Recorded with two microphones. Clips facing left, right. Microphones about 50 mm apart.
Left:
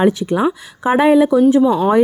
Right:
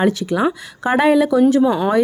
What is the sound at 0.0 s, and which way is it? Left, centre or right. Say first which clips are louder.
A woman's voice: left 2 dB; centre.